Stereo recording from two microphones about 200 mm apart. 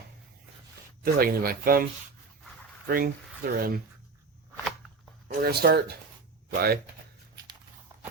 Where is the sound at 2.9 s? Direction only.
45° right (ahead or behind).